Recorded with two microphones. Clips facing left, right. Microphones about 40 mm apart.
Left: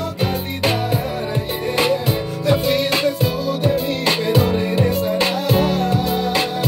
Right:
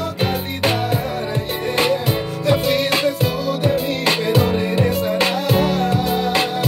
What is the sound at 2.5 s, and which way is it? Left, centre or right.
Music, right.